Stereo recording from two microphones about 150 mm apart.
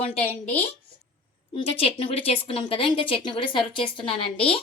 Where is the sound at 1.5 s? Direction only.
40° left (ahead or behind).